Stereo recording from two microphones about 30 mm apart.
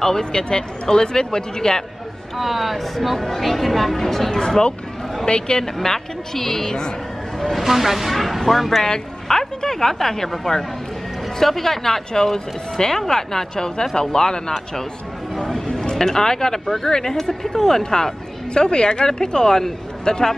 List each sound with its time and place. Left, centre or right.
0.2 s a woman's voice: left
2.3 s speech: centre
4.4 s a woman's voice: left
5.6 s speech: centre
6.6 s a woman's voice: left
7.5 s speech: centre
8.1 s speech: centre
8.8 s a woman's voice: left
15.3 s a woman's voice: centre